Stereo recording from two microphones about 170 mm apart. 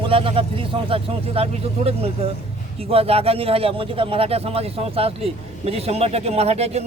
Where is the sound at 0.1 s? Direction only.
30° right (ahead or behind).